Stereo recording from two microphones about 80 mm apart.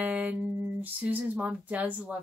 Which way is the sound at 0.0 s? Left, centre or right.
Right.